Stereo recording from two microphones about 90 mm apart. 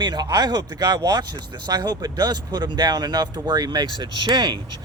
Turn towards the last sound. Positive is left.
turn(degrees=-55)  # may be behind; listen again after turning